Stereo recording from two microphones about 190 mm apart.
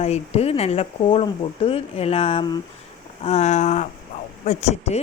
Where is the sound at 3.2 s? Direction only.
35° left (ahead or behind).